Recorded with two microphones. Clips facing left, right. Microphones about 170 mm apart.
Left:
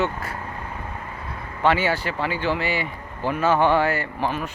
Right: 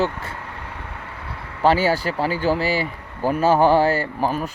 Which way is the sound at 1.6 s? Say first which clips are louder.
Right 3 dB; 35° right (ahead or behind).